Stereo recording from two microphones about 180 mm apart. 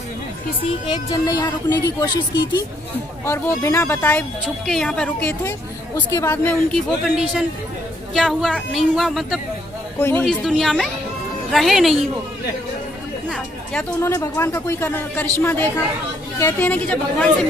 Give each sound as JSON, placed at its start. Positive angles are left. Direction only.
{"t": 0.8, "sound": "a woman's voice", "side_deg": 20}
{"t": 13.3, "sound": "chatter", "side_deg": 5}
{"t": 14.1, "sound": "speech", "side_deg": 15}